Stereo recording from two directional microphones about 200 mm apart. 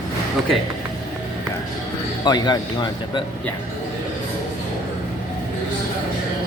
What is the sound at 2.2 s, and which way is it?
A man's voice, 20° left (ahead or behind).